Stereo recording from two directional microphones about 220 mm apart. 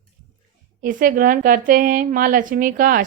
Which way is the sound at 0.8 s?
40° right (ahead or behind).